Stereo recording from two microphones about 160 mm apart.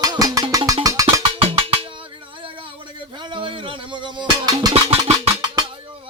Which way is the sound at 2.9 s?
30° right (ahead or behind).